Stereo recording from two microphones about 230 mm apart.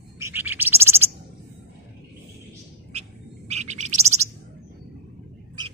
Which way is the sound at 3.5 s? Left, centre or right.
Right.